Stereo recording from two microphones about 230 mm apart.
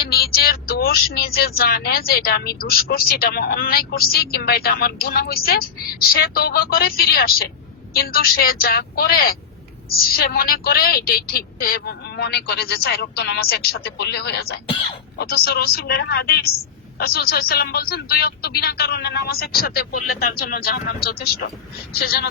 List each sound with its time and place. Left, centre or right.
0.0 s speech: left